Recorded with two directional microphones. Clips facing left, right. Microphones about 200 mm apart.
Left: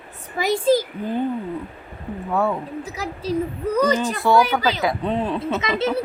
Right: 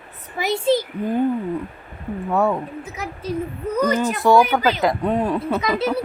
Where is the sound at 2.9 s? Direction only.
35° left (ahead or behind).